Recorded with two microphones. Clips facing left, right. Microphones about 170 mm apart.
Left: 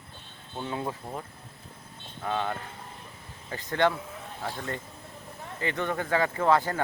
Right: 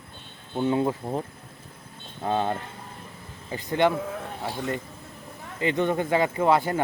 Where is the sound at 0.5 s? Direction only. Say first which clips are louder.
Right 9 dB; 20° right (ahead or behind).